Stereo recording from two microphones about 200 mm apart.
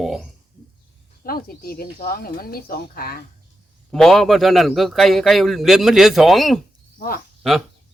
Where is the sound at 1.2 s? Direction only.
50° left (ahead or behind).